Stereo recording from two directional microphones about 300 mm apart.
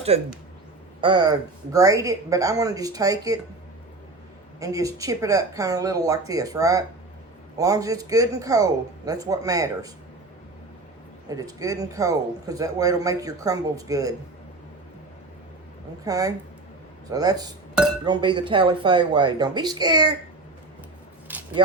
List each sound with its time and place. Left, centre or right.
0.1 s speech: right
4.6 s speech: centre
11.3 s speech: centre
16.0 s speech: centre
21.3 s a sound: centre